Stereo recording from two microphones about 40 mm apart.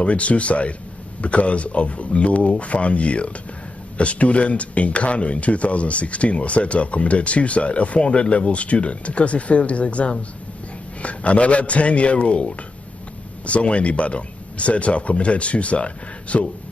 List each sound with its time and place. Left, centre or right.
0.0 s speech: left